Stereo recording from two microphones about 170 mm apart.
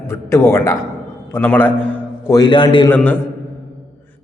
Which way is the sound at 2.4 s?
25° left (ahead or behind).